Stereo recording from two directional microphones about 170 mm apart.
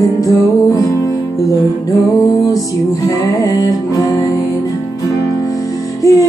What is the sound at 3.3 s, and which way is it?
Music, 20° left (ahead or behind).